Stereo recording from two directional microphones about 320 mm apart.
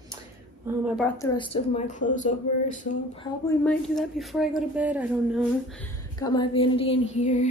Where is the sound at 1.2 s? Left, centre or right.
Centre.